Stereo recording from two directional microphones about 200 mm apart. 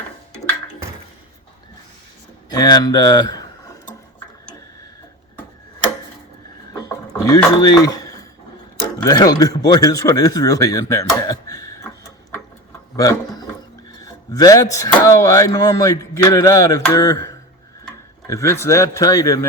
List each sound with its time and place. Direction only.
2.5 s speech: 20° left (ahead or behind)
6.7 s music: 20° left (ahead or behind)
9.0 s speech: 20° left (ahead or behind)
13.0 s a sound: 20° left (ahead or behind)
14.0 s speech: 15° left (ahead or behind)
18.3 s speech: 15° left (ahead or behind)